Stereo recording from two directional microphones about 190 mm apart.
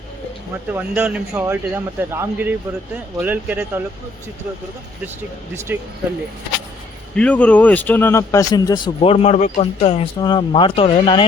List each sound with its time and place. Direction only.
0.7 s a man's voice: 10° right (ahead or behind)
5.7 s a man's voice: 10° right (ahead or behind)
7.2 s a man's voice: 5° left (ahead or behind); by 11.3 s 25° left (ahead or behind)